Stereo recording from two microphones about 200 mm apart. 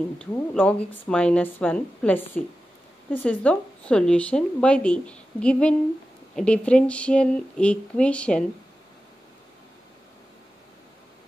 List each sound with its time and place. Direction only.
0.2 s a woman's voice: 5° left (ahead or behind)